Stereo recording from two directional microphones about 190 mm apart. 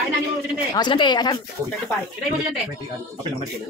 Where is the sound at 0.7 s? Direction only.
25° left (ahead or behind).